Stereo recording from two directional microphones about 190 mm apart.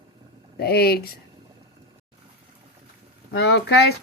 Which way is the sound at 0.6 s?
55° left (ahead or behind).